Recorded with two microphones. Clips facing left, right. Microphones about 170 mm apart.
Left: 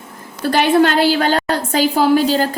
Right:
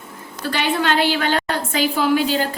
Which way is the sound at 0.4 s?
45° left (ahead or behind).